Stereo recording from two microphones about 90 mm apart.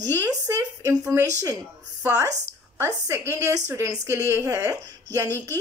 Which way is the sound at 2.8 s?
30° right (ahead or behind).